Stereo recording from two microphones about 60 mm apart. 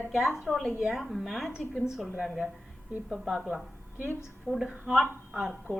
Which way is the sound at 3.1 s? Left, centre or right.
Centre.